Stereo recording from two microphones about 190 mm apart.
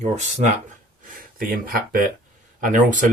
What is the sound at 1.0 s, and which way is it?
Speech, 50° right (ahead or behind).